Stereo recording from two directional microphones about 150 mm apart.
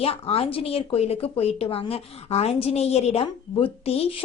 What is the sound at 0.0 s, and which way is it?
Speech, 40° left (ahead or behind).